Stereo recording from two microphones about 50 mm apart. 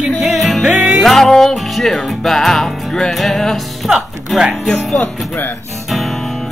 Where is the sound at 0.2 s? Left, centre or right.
Centre.